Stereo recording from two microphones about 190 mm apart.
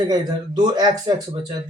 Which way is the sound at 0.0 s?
20° right (ahead or behind).